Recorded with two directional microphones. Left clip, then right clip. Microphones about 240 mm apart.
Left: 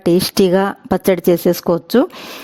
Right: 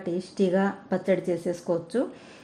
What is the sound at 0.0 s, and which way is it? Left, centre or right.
Speech, left.